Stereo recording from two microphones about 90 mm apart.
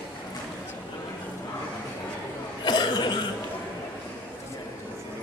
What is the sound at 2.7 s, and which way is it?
Cough, 55° left (ahead or behind).